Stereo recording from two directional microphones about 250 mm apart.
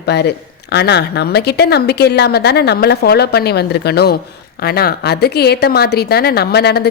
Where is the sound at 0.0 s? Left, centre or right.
Left.